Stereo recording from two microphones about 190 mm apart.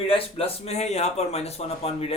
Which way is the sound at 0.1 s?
30° left (ahead or behind).